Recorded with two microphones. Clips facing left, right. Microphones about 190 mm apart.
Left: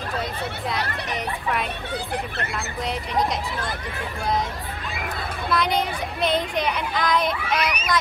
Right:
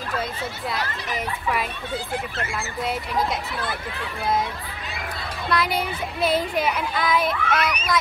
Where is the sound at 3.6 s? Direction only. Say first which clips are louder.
Even; 45° left (ahead or behind).